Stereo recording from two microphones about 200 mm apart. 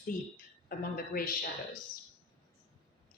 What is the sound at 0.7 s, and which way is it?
Speech, 45° left (ahead or behind).